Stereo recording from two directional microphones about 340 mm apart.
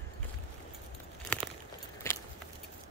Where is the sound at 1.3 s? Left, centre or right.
Centre.